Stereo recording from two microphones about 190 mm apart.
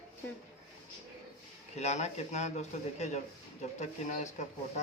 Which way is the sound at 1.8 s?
35° left (ahead or behind).